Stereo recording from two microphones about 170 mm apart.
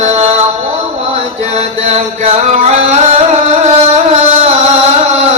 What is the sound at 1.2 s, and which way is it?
Mantra, 40° right (ahead or behind).